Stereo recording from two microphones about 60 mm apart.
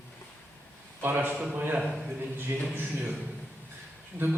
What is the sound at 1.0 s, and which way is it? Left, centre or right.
Speech, right.